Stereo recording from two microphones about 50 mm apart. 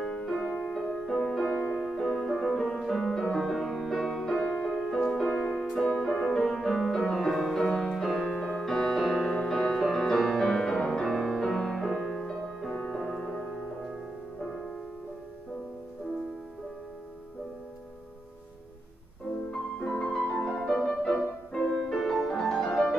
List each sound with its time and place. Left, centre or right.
0.0 s music: centre
1.8 s music: centre
4.3 s music: centre
5.7 s music: centre
8.5 s music: centre
11.1 s music: centre
12.9 s music: centre
19.5 s music: left
20.5 s music: centre
21.5 s music: centre
21.8 s music: centre